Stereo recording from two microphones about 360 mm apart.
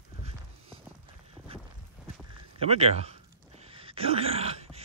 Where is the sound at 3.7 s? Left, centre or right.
Centre.